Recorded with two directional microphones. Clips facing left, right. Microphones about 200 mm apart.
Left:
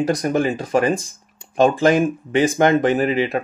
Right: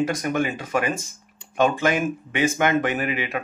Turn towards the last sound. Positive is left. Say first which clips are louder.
# left 7 dB
turn(degrees=35)  # may be behind; listen again after turning